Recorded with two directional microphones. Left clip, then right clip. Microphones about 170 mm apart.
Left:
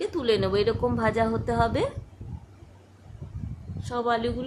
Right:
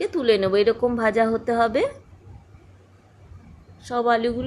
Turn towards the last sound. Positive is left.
turn(degrees=-30)  # may be behind; listen again after turning